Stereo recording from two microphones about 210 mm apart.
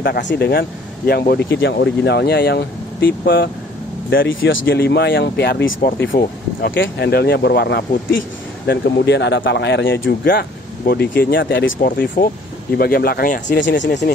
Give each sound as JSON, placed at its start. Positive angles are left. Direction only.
{"t": 0.0, "sound": "speech", "side_deg": 55}
{"t": 4.1, "sound": "speech", "side_deg": 65}
{"t": 4.6, "sound": "speech", "side_deg": 50}
{"t": 10.9, "sound": "speech", "side_deg": 45}
{"t": 13.6, "sound": "speech", "side_deg": 60}